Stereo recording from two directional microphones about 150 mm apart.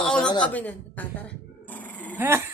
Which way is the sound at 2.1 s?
15° right (ahead or behind).